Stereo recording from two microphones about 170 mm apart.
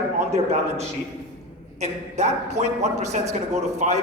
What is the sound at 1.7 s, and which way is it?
A man's voice, 40° right (ahead or behind).